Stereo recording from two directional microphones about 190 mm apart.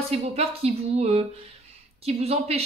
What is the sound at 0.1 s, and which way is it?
Speech, 30° right (ahead or behind).